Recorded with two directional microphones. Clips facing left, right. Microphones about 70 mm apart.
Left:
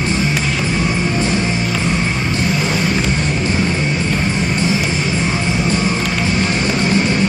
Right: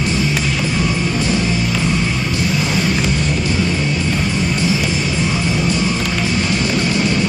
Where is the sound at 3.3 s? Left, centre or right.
Left.